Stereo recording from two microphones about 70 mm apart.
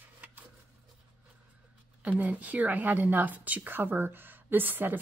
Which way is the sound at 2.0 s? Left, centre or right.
Right.